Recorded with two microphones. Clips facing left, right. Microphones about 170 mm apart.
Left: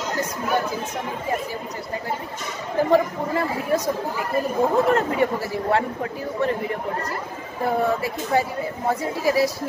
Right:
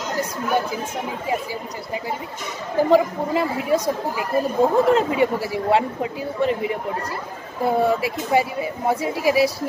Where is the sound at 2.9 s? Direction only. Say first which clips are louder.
Right 2 dB; 15° right (ahead or behind).